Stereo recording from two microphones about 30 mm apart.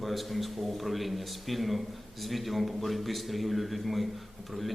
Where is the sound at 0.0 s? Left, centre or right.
Centre.